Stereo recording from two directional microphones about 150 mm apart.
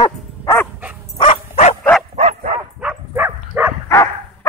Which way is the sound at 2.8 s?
10° right (ahead or behind).